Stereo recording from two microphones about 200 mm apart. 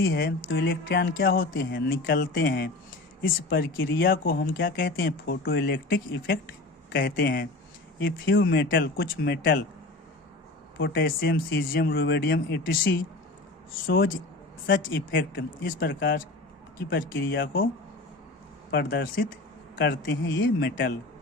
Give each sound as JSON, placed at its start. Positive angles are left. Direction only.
{"t": 0.1, "sound": "speech", "side_deg": 60}
{"t": 5.5, "sound": "speech", "side_deg": 60}
{"t": 8.8, "sound": "speech", "side_deg": 50}
{"t": 10.8, "sound": "speech", "side_deg": 50}
{"t": 15.6, "sound": "speech", "side_deg": 45}
{"t": 18.7, "sound": "speech", "side_deg": 55}
{"t": 20.2, "sound": "speech", "side_deg": 60}